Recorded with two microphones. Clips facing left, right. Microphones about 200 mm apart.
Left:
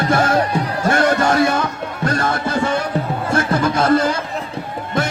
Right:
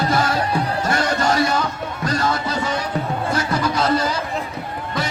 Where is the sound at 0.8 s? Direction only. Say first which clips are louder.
Left 7 dB; 55° left (ahead or behind).